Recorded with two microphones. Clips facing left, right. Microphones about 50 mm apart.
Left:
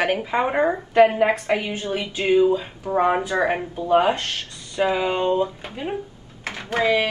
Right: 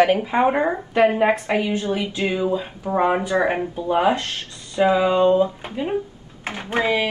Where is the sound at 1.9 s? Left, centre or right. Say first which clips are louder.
Left 3 dB; left.